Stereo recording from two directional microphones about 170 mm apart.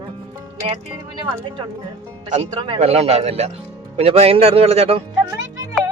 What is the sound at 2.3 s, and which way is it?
Speech, 35° right (ahead or behind).